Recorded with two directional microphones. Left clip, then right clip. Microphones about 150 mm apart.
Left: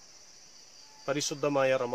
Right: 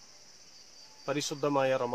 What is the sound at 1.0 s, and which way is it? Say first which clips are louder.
Speech: left 1 dB; 15° left (ahead or behind).